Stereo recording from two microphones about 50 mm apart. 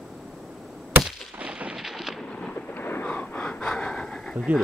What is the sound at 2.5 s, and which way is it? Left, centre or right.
Vehicle, left.